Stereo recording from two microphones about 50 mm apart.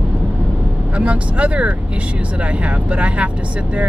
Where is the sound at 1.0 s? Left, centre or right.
Right.